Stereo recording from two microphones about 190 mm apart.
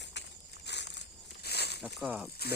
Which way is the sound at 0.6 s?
65° left (ahead or behind).